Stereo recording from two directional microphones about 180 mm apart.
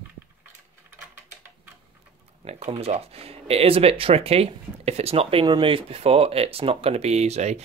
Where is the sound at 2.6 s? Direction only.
35° right (ahead or behind).